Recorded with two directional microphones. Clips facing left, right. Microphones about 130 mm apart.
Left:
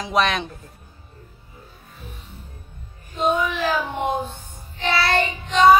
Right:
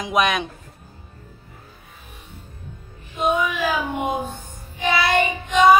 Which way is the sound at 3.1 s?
10° right (ahead or behind).